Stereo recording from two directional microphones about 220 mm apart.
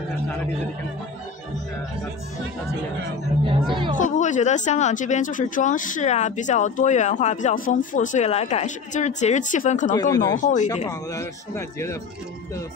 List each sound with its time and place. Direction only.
3.9 s speech: 35° left (ahead or behind)
9.9 s speech: 15° left (ahead or behind)
10.4 s speech: 35° left (ahead or behind)
10.9 s speech: 15° left (ahead or behind)